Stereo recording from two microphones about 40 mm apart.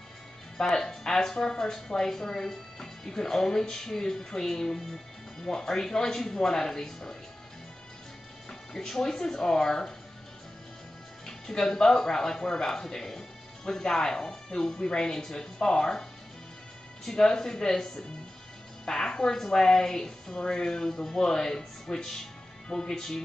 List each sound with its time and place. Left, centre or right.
0.6 s speech: centre
8.5 s speech: centre
11.2 s speech: centre